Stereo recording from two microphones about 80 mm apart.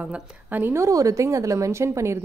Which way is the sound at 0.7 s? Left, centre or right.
Right.